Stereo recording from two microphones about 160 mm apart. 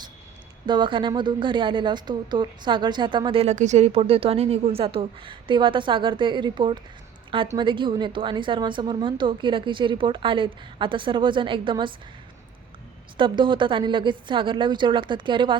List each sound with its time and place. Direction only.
0.6 s speech: 30° right (ahead or behind)
3.5 s a woman's voice: 50° right (ahead or behind); by 11.9 s 30° right (ahead or behind)
13.1 s a woman's voice: 30° right (ahead or behind)